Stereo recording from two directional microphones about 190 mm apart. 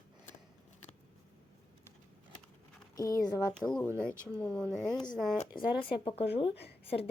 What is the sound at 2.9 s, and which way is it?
Speech, 20° left (ahead or behind).